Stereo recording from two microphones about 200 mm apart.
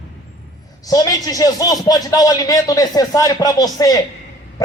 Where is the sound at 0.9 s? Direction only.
20° left (ahead or behind).